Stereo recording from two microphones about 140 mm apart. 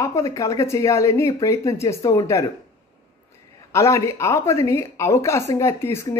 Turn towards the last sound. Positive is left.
turn(degrees=20)  # may be behind; listen again after turning